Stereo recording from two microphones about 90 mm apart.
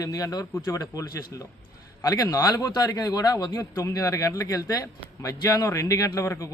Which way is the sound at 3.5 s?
35° left (ahead or behind).